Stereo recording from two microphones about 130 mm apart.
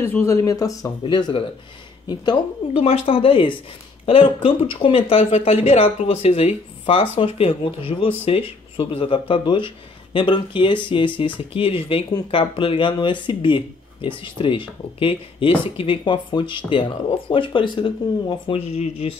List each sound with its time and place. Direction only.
0.0 s speech: 20° left (ahead or behind)
1.0 s speech: 35° left (ahead or behind)
2.8 s speech: 45° left (ahead or behind)
18.5 s speech: 50° left (ahead or behind)